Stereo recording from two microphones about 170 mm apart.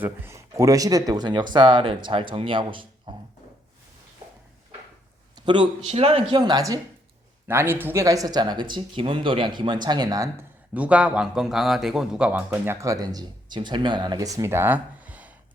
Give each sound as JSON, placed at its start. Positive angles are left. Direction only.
{"t": 0.0, "sound": "speech", "side_deg": -15}
{"t": 3.1, "sound": "a sound", "side_deg": -25}
{"t": 5.5, "sound": "a man's voice", "side_deg": -30}
{"t": 6.3, "sound": "speech", "side_deg": -25}
{"t": 10.8, "sound": "a man's voice", "side_deg": -10}
{"t": 12.8, "sound": "speech", "side_deg": -20}